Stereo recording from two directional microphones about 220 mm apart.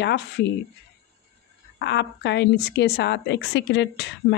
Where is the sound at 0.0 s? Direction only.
50° left (ahead or behind).